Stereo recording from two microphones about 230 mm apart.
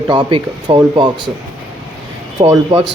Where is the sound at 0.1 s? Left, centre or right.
Centre.